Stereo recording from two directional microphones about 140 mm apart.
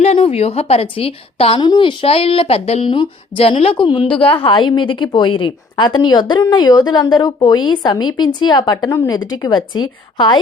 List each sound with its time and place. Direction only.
0.0 s a woman's voice: 50° left (ahead or behind)
1.6 s speech: 35° left (ahead or behind)